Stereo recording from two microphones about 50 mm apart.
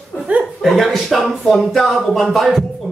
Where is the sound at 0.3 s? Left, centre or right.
Right.